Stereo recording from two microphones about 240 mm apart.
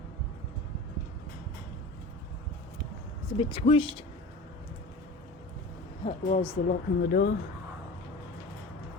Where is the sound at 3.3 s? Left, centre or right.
Left.